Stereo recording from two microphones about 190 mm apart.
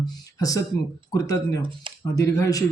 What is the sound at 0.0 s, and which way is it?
A man's voice, 20° left (ahead or behind).